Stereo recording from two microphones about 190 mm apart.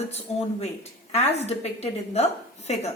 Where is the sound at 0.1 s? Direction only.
35° left (ahead or behind).